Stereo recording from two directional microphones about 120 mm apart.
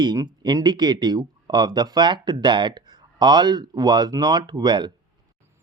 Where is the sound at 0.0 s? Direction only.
35° right (ahead or behind).